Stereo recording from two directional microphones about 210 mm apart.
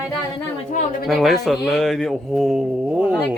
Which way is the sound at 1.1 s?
Centre (ahead or behind).